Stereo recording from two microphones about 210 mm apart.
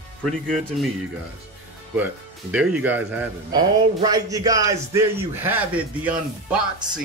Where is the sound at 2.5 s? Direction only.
5° right (ahead or behind).